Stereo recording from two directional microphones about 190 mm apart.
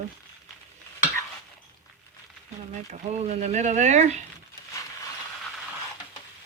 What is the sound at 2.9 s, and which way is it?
Speech, 35° right (ahead or behind).